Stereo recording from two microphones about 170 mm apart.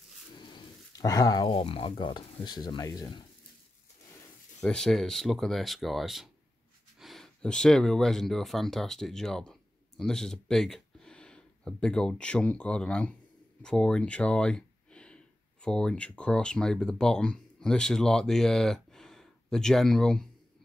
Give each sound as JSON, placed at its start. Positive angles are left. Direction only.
{"t": 0.4, "sound": "speech", "side_deg": 25}
{"t": 4.6, "sound": "speech", "side_deg": 5}